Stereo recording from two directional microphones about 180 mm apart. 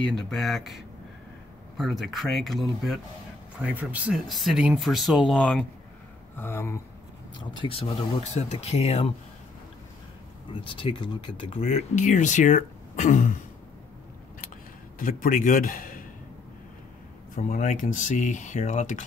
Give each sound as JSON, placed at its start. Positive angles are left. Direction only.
{"t": 0.0, "sound": "speech", "side_deg": 0}
{"t": 7.6, "sound": "speech", "side_deg": 30}
{"t": 10.6, "sound": "speech", "side_deg": 30}
{"t": 15.0, "sound": "speech", "side_deg": 50}
{"t": 17.4, "sound": "speech", "side_deg": 45}